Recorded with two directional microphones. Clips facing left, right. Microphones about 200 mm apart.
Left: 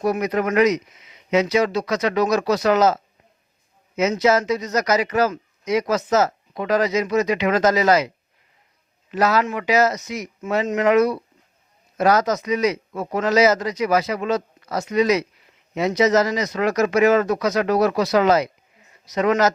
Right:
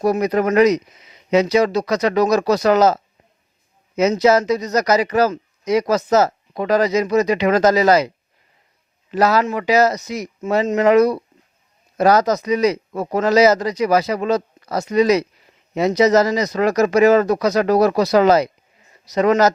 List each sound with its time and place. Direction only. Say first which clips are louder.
0.0 s a man's voice: right 4 dB; 35° right (ahead or behind)
9.1 s a man's voice: right 3 dB; 35° right (ahead or behind)